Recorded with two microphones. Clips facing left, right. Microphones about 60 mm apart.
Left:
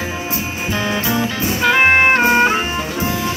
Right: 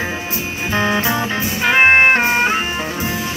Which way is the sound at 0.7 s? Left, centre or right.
Right.